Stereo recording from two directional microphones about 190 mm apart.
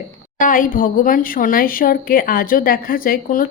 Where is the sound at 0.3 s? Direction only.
45° left (ahead or behind).